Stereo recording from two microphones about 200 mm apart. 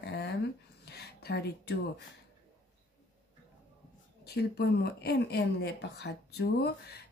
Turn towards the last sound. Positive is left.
turn(degrees=55)  # may be behind; listen again after turning